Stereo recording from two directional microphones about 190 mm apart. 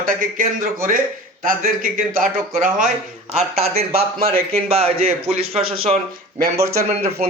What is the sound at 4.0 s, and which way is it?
Speech, 50° right (ahead or behind).